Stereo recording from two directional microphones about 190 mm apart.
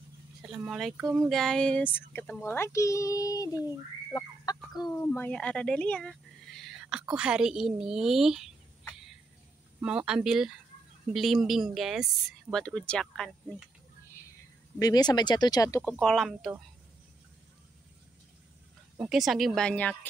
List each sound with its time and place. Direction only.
0.4 s speech: 5° right (ahead or behind)
1.3 s a child's voice: centre (ahead or behind); by 3.4 s 20° left (ahead or behind)
3.6 s a sound: 20° left (ahead or behind)
4.9 s speech: 10° left (ahead or behind)
9.8 s speech: 5° right (ahead or behind)
14.8 s speech: 20° left (ahead or behind)
15.8 s speech: 5° left (ahead or behind)
18.9 s speech: centre (ahead or behind)